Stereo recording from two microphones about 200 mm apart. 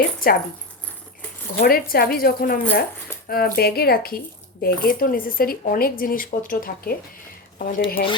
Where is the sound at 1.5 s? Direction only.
50° left (ahead or behind).